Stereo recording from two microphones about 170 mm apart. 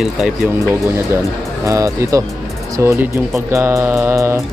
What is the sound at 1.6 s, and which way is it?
Speech, 20° right (ahead or behind).